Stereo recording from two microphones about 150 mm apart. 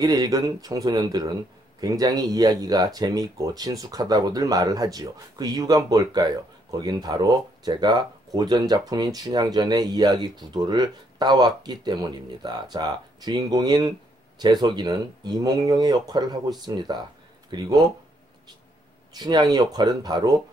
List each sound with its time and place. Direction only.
0.0 s speech: 25° right (ahead or behind)
19.1 s speech: 25° right (ahead or behind)